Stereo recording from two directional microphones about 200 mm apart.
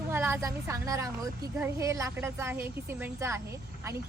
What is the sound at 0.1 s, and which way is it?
A woman's voice, 10° right (ahead or behind).